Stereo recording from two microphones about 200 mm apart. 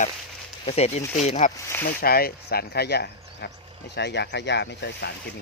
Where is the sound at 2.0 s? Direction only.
50° left (ahead or behind).